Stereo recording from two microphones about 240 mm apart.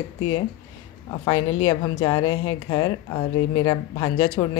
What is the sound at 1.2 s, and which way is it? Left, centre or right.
A woman's voice, centre.